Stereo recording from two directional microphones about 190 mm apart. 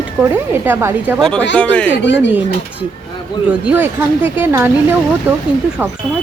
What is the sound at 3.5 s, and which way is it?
A woman's voice, 10° right (ahead or behind).